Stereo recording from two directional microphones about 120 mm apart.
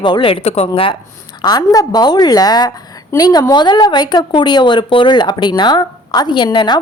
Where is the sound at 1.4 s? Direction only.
30° left (ahead or behind).